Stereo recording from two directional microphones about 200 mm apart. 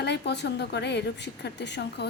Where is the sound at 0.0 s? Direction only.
55° left (ahead or behind).